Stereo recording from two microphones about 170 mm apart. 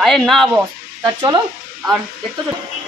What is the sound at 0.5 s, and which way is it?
Speech, 20° right (ahead or behind).